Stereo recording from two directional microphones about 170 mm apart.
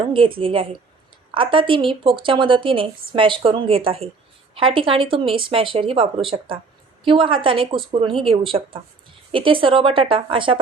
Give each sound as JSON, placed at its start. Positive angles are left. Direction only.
{"t": 0.0, "sound": "a woman's voice", "side_deg": -30}